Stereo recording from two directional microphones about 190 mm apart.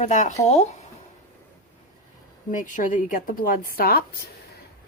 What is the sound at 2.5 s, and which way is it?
Speech, 45° left (ahead or behind).